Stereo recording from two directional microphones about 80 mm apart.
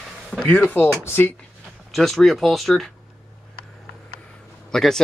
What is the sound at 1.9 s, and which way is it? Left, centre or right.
Speech, centre.